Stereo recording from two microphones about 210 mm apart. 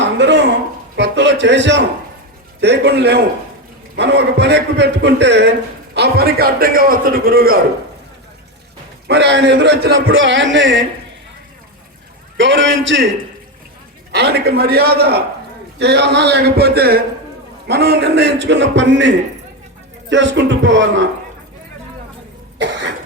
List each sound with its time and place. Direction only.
0.0 s a sound: 55° right (ahead or behind)
0.9 s a man's voice: 55° right (ahead or behind)
9.0 s a man's voice: 55° right (ahead or behind)
12.4 s a man's voice: 60° right (ahead or behind)
14.1 s a man's voice: 50° right (ahead or behind)